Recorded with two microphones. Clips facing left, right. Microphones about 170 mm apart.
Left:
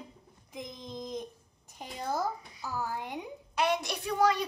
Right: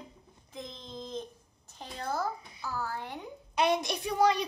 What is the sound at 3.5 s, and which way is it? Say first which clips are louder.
Speech: right 2 dB; 20° right (ahead or behind).